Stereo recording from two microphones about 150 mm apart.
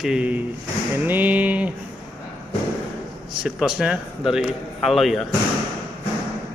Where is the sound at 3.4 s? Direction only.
5° right (ahead or behind).